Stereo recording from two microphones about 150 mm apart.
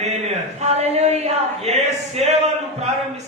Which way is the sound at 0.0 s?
45° right (ahead or behind).